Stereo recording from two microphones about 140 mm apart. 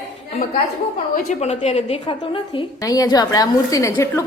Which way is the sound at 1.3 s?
55° left (ahead or behind).